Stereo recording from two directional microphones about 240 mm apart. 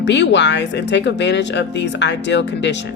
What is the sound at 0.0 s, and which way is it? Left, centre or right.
A woman's voice, left.